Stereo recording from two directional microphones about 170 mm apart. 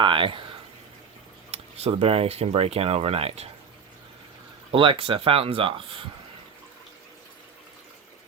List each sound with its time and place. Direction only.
0.0 s speech: 30° right (ahead or behind)
1.5 s speech: 35° right (ahead or behind)
4.7 s speech: 30° right (ahead or behind)